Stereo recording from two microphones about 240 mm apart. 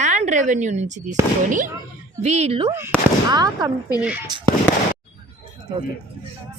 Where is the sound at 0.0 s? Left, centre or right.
Right.